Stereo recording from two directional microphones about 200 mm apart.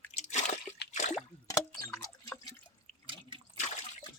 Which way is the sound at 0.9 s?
35° left (ahead or behind).